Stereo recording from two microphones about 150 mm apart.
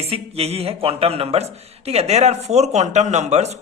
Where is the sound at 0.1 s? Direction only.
45° right (ahead or behind).